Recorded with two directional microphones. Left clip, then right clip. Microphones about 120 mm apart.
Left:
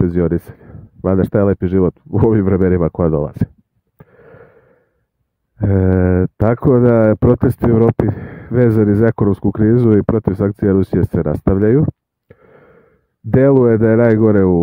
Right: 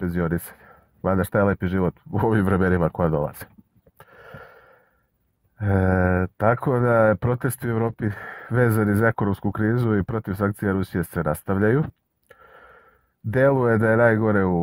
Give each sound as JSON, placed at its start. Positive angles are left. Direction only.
{"t": 0.0, "sound": "speech", "side_deg": 90}
{"t": 1.0, "sound": "speech", "side_deg": 80}
{"t": 2.1, "sound": "speech", "side_deg": 45}
{"t": 3.0, "sound": "speech", "side_deg": 65}
{"t": 4.0, "sound": "a sound", "side_deg": 50}
{"t": 5.6, "sound": "speech", "side_deg": 55}
{"t": 11.2, "sound": "speech", "side_deg": 60}
{"t": 12.3, "sound": "a sound", "side_deg": 60}
{"t": 13.3, "sound": "speech", "side_deg": 65}